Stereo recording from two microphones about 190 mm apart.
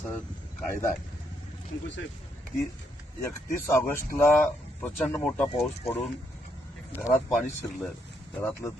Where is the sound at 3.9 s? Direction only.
10° left (ahead or behind).